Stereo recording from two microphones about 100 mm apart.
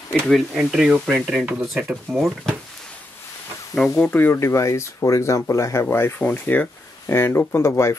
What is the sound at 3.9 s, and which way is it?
Speech, 15° left (ahead or behind).